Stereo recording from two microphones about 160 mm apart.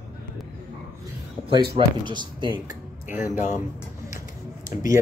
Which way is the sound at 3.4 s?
50° left (ahead or behind).